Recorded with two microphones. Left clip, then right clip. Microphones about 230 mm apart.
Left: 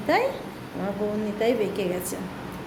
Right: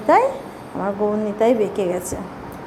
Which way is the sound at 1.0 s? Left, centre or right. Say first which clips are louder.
Right 7 dB; centre.